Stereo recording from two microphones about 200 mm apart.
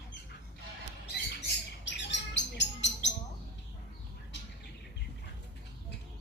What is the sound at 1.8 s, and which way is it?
Bird, 60° left (ahead or behind).